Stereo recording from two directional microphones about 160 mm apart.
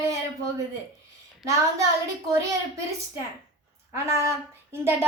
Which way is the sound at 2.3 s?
20° right (ahead or behind).